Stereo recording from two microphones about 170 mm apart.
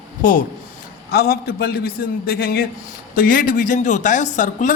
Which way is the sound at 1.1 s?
65° left (ahead or behind).